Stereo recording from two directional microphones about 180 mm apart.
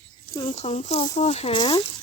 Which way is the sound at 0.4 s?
35° left (ahead or behind).